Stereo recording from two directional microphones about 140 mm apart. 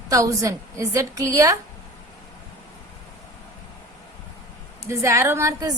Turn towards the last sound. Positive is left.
turn(degrees=-25)  # may be behind; listen again after turning